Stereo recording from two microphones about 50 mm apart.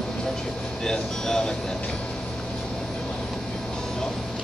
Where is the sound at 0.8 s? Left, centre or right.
Centre.